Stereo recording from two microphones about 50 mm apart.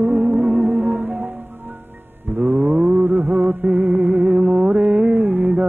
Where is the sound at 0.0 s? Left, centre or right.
Right.